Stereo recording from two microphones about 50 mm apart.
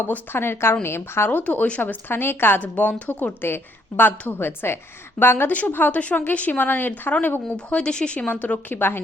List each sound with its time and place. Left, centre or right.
0.3 s a woman's voice: left
1.3 s speech: left
1.8 s a woman's voice: left
5.5 s a woman's voice: left
7.5 s speech: centre
8.3 s a woman's voice: left